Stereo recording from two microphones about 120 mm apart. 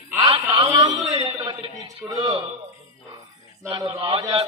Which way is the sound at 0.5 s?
30° right (ahead or behind).